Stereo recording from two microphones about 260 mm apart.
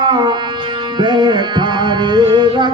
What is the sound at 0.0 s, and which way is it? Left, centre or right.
Music, centre.